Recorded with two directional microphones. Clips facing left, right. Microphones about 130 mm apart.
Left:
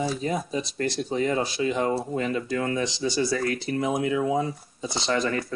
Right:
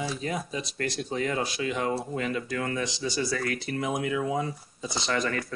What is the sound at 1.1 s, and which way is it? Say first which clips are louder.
Speech: left 4 dB; 30° left (ahead or behind).